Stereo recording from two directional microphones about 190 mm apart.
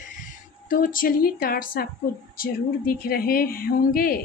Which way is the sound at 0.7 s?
45° left (ahead or behind).